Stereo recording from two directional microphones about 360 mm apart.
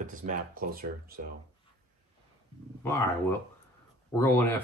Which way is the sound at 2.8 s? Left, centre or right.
Centre.